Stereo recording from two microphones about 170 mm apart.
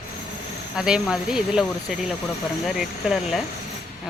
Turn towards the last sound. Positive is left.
turn(degrees=0)  # may be behind; listen again after turning